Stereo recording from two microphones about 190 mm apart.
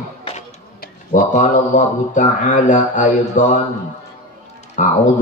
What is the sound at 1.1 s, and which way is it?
Speech, 40° left (ahead or behind).